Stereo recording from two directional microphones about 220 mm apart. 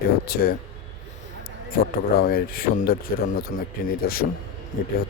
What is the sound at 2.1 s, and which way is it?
Speech, 40° left (ahead or behind).